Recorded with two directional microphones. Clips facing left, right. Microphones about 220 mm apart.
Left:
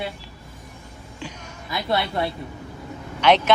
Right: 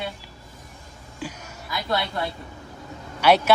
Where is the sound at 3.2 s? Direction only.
10° right (ahead or behind).